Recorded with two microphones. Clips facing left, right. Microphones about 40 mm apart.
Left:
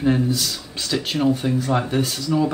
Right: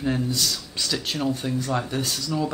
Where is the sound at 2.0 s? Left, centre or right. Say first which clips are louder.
Left 5 dB; centre.